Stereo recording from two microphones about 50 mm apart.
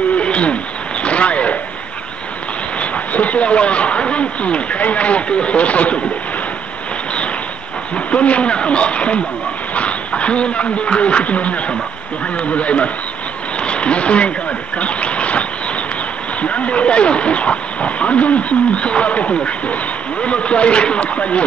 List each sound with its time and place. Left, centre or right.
0.2 s a sound: left
2.8 s speech: left
7.9 s speech: left